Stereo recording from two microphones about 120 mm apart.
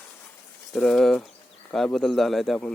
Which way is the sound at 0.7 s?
5° left (ahead or behind).